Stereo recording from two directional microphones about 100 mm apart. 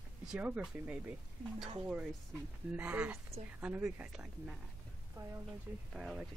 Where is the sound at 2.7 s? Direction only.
15° right (ahead or behind).